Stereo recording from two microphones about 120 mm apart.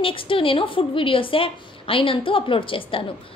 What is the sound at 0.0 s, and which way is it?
A woman's voice, 45° left (ahead or behind).